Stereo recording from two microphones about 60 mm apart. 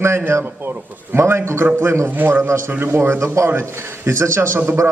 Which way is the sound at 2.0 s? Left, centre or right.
Right.